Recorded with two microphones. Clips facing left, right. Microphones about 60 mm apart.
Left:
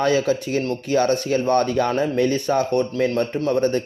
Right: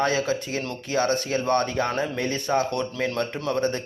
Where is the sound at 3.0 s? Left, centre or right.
Right.